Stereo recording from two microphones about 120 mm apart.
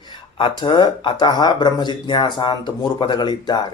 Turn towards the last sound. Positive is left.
turn(degrees=35)  # may be behind; listen again after turning